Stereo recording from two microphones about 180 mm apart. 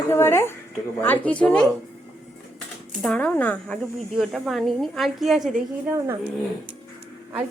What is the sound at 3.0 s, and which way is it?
Speech, 5° left (ahead or behind).